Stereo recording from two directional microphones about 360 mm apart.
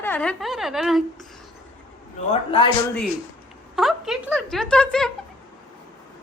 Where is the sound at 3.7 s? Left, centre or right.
Centre.